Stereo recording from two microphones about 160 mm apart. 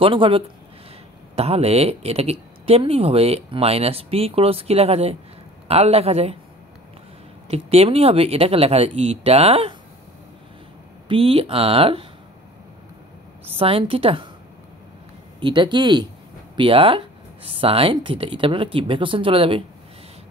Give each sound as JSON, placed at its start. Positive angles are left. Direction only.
{"t": 0.0, "sound": "speech", "side_deg": -35}
{"t": 7.4, "sound": "speech", "side_deg": -40}
{"t": 11.1, "sound": "speech", "side_deg": -35}
{"t": 13.6, "sound": "speech", "side_deg": -35}
{"t": 15.4, "sound": "speech", "side_deg": -30}